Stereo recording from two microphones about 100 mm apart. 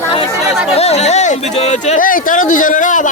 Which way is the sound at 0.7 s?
90° left.